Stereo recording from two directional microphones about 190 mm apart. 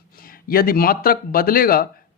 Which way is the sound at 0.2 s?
50° left (ahead or behind).